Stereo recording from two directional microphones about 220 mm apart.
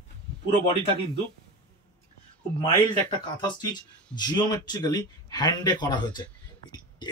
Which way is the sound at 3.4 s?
20° left (ahead or behind).